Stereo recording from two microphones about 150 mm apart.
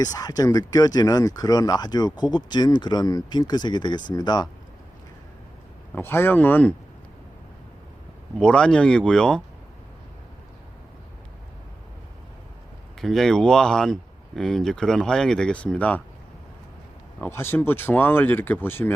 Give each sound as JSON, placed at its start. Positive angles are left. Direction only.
{"t": 0.0, "sound": "speech", "side_deg": 25}
{"t": 5.9, "sound": "speech", "side_deg": 15}
{"t": 8.4, "sound": "speech", "side_deg": 5}
{"t": 13.0, "sound": "speech", "side_deg": 0}
{"t": 17.2, "sound": "speech", "side_deg": 15}